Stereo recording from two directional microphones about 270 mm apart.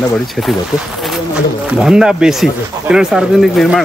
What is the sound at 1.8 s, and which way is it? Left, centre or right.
Speech, centre.